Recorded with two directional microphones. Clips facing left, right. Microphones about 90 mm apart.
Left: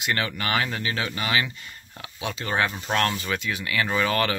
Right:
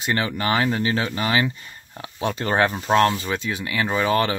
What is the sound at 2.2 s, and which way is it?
Speech, 45° right (ahead or behind).